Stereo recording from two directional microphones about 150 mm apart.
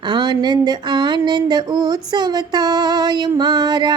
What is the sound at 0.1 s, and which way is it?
Music, 30° right (ahead or behind).